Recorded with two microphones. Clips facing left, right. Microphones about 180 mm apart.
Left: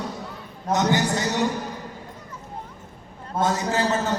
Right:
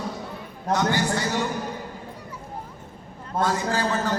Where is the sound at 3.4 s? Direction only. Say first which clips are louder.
Left 1 dB; 20° left (ahead or behind).